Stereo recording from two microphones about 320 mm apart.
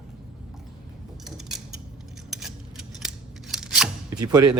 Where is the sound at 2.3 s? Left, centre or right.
Centre.